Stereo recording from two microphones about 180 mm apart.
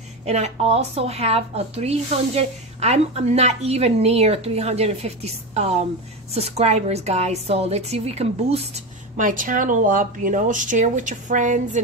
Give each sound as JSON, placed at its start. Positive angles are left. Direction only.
{"t": 0.2, "sound": "a woman's voice", "side_deg": -35}